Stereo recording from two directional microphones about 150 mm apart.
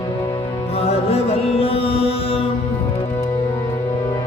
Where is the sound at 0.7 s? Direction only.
40° left (ahead or behind).